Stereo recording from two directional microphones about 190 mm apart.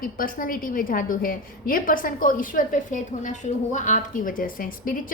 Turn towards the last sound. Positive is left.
turn(degrees=45)  # may be behind; listen again after turning